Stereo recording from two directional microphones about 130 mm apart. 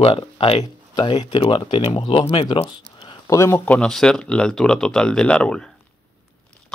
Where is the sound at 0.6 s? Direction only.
30° left (ahead or behind).